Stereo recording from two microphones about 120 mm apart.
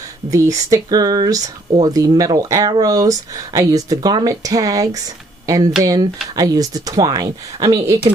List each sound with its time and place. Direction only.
0.3 s speech: 25° right (ahead or behind)